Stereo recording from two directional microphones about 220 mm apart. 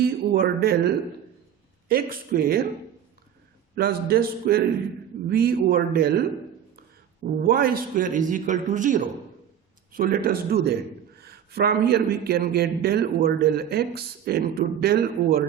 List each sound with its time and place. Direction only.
0.0 s a man's voice: 45° right (ahead or behind)
3.8 s a man's voice: 45° right (ahead or behind)
7.4 s a man's voice: 40° right (ahead or behind)